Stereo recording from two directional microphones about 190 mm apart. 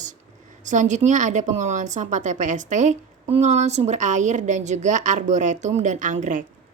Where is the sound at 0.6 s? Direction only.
40° right (ahead or behind).